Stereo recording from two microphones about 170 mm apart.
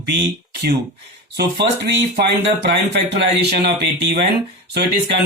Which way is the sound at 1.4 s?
75° right (ahead or behind).